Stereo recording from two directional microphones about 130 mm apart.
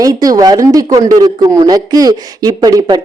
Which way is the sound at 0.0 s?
30° right (ahead or behind).